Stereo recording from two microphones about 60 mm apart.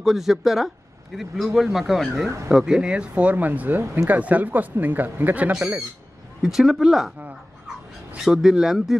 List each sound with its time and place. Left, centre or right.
0.0 s speech: centre
2.2 s speech: right
2.5 s speech: centre; by 3.8 s right
3.8 s speech: right
4.1 s speech: right
6.4 s speech: centre
8.2 s speech: centre